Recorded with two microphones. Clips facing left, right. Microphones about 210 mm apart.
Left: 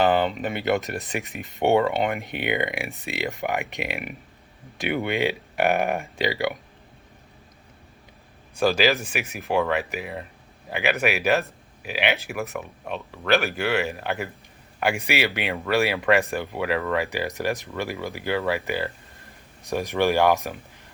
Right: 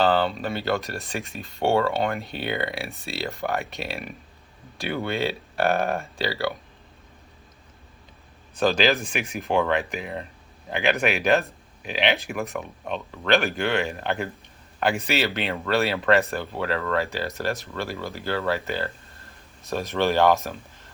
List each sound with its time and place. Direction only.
0.0 s speech: 15° left (ahead or behind)
8.5 s speech: 10° left (ahead or behind)